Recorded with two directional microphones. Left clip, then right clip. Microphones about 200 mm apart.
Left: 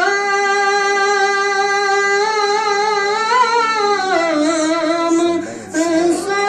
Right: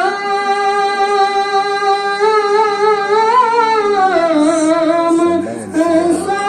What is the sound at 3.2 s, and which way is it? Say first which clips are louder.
Humming: right 2 dB; 5° right (ahead or behind).